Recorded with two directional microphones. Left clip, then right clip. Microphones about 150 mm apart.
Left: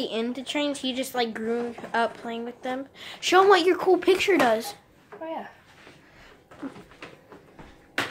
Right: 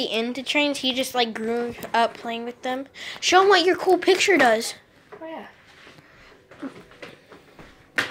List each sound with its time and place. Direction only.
0.0 s a woman's voice: centre (ahead or behind); by 4.0 s 15° left (ahead or behind)
4.0 s a woman's voice: 5° left (ahead or behind)